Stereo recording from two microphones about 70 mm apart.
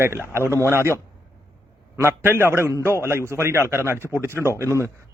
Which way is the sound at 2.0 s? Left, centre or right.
Right.